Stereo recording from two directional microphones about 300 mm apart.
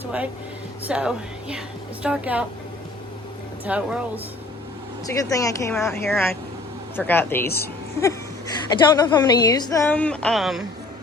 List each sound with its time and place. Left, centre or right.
0.9 s a woman's voice: centre
3.7 s a woman's voice: centre
5.1 s a woman's voice: centre